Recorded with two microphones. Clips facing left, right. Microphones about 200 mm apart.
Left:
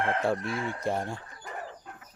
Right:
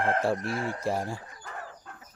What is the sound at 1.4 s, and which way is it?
Bird, 15° left (ahead or behind).